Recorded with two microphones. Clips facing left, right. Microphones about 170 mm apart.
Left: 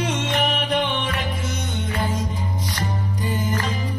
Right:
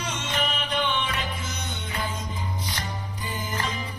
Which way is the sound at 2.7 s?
45° left (ahead or behind).